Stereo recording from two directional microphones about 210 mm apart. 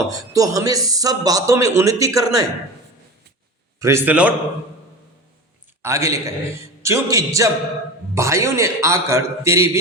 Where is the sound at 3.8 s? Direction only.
10° right (ahead or behind).